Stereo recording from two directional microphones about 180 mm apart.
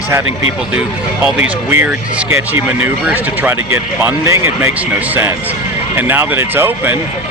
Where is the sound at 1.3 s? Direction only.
10° right (ahead or behind).